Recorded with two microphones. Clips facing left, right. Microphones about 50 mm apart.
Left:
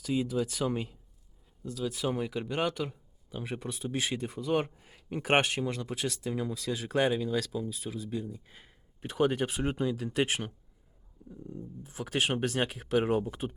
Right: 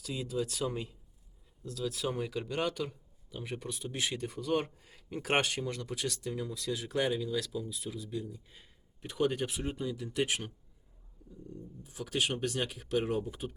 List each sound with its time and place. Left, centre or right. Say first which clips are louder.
0.0 s speech: left 5 dB; left
1.6 s speech: left 3 dB; centre
6.4 s speech: left 3 dB; left
7.5 s speech: left 3 dB; left
9.6 s speech: left 5 dB; left
11.8 s speech: left 2 dB; left